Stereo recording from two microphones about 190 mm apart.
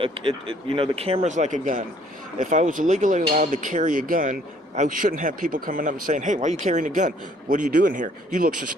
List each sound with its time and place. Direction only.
0.0 s speech: 30° right (ahead or behind); by 8.5 s 45° right (ahead or behind)